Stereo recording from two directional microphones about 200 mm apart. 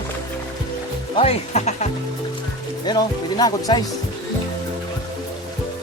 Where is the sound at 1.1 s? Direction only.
30° left (ahead or behind).